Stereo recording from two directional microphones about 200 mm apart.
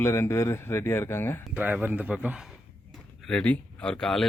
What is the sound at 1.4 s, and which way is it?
A man's voice, 5° right (ahead or behind).